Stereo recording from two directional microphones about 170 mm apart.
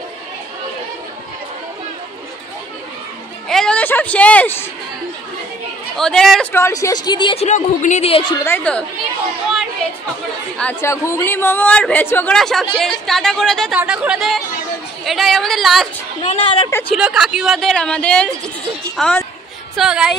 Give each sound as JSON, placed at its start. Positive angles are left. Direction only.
{"t": 3.4, "sound": "a sound", "side_deg": 5}
{"t": 5.9, "sound": "speech", "side_deg": 5}
{"t": 6.5, "sound": "speech", "side_deg": 15}
{"t": 7.4, "sound": "a woman's voice", "side_deg": 45}
{"t": 8.5, "sound": "a man's voice", "side_deg": 10}
{"t": 10.6, "sound": "a man's voice", "side_deg": 10}
{"t": 16.2, "sound": "a woman's voice", "side_deg": 35}
{"t": 16.9, "sound": "speech", "side_deg": -5}